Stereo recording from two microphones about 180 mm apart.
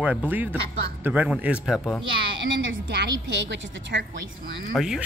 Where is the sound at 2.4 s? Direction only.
65° right (ahead or behind).